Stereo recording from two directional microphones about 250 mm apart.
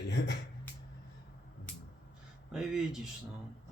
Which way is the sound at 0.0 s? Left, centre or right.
Left.